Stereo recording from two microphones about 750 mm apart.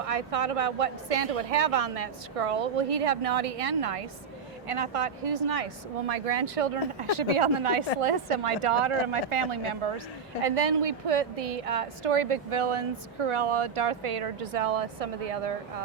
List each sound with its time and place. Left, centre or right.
0.0 s a woman's voice: right